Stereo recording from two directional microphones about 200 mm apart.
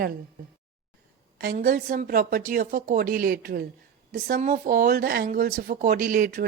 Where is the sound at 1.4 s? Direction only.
45° right (ahead or behind).